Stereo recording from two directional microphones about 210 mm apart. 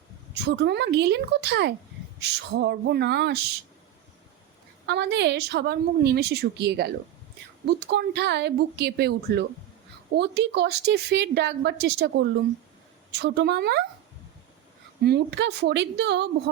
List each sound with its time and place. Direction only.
0.4 s speech: 55° right (ahead or behind)
4.9 s speech: 55° right (ahead or behind)
13.2 s speech: 55° right (ahead or behind)
15.0 s speech: 50° right (ahead or behind)